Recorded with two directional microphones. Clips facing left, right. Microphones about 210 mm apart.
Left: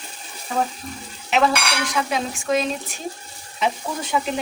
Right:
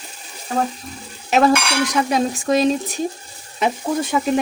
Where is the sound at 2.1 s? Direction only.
40° right (ahead or behind).